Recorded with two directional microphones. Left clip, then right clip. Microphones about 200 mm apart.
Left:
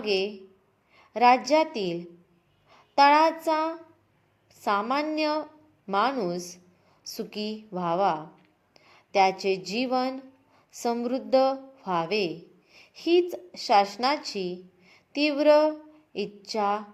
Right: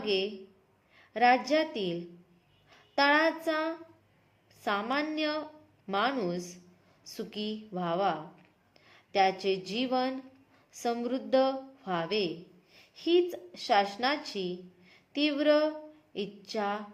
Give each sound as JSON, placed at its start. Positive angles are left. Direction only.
{"t": 0.0, "sound": "a woman's voice", "side_deg": 20}
{"t": 2.6, "sound": "child singing", "side_deg": 20}
{"t": 4.6, "sound": "a woman's voice", "side_deg": 20}